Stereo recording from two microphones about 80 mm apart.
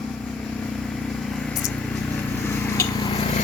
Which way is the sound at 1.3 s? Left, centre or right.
Centre.